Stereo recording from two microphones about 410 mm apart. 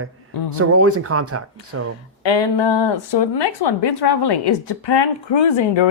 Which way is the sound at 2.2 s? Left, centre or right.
Left.